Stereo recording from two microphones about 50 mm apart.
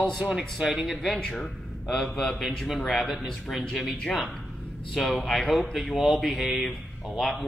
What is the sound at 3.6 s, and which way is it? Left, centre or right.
Speech, centre.